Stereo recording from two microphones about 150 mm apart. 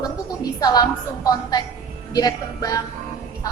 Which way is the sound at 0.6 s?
25° left (ahead or behind).